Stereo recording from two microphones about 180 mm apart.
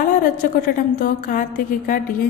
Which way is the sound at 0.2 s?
50° left (ahead or behind).